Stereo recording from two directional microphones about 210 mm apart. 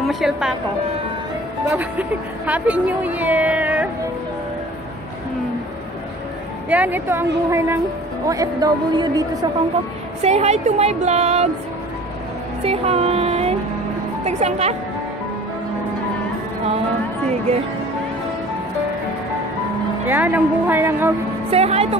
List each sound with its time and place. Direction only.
0.1 s a woman's voice: centre (ahead or behind)
1.7 s a woman's voice: 10° right (ahead or behind)
6.7 s a woman's voice: 10° right (ahead or behind)
10.2 s speech: 30° right (ahead or behind)
12.6 s speech: 30° right (ahead or behind)
20.1 s a woman's voice: 10° right (ahead or behind)
21.5 s speech: 30° right (ahead or behind)